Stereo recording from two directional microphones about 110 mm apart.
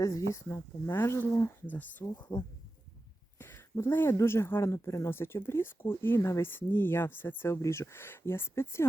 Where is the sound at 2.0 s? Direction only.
40° left (ahead or behind).